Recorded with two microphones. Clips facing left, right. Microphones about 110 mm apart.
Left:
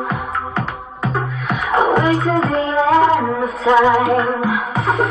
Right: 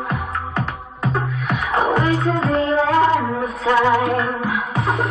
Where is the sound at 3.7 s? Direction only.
20° left (ahead or behind).